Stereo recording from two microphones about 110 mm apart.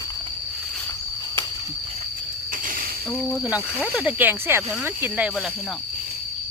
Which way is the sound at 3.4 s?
10° right (ahead or behind).